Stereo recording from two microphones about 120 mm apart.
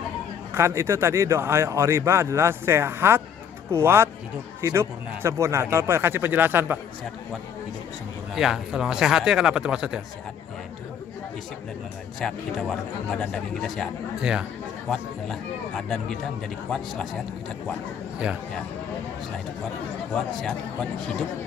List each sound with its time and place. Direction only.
0.6 s speech: 20° right (ahead or behind)
8.4 s speech: 5° right (ahead or behind)
12.2 s speech: 5° left (ahead or behind)
14.9 s speech: 5° left (ahead or behind)
20.2 s speech: 5° left (ahead or behind)